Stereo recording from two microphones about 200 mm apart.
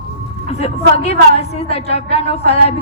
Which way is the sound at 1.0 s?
30° left (ahead or behind).